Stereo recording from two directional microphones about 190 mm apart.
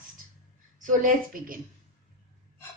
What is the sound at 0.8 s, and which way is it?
Speech, 45° right (ahead or behind).